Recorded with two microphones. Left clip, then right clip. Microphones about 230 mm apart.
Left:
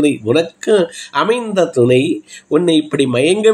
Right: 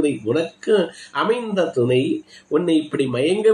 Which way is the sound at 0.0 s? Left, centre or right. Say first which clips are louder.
Left 6 dB; left.